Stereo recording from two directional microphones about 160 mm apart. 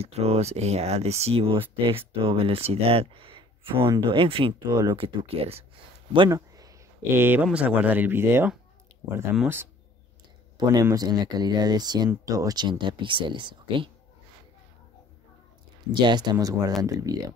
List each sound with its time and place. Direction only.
0.0 s speech: 40° right (ahead or behind)
6.1 s a sound: 25° right (ahead or behind)
7.4 s speech: 10° right (ahead or behind)
10.6 s speech: 25° right (ahead or behind)
15.9 s speech: 30° right (ahead or behind)